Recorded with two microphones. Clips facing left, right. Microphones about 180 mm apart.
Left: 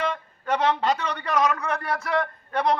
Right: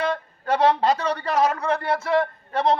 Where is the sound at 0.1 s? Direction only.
35° right (ahead or behind).